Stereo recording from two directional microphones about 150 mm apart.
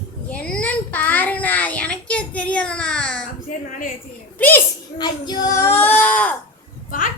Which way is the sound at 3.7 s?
60° left (ahead or behind).